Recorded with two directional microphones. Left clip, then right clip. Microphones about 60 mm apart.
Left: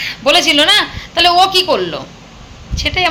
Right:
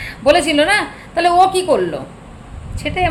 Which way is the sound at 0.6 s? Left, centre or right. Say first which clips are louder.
Left 4 dB; right.